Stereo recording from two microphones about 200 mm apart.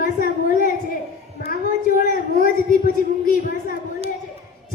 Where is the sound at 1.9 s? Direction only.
45° left (ahead or behind).